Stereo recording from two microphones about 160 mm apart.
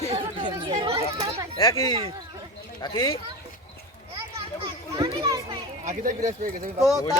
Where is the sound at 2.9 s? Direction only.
30° left (ahead or behind).